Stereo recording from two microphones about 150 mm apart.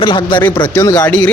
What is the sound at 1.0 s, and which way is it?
Speech, 10° left (ahead or behind).